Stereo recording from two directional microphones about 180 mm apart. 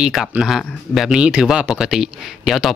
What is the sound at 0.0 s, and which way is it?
Speech, centre (ahead or behind).